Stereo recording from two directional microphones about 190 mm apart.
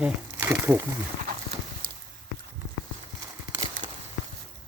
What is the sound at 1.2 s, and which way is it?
Clip-clop, 50° right (ahead or behind).